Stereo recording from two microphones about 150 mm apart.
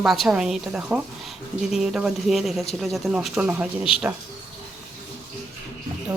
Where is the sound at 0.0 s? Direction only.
Centre (ahead or behind).